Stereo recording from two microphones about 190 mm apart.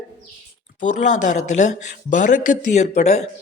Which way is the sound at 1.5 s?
40° left (ahead or behind).